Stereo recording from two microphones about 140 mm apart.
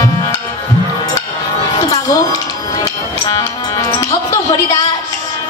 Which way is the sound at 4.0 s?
25° left (ahead or behind).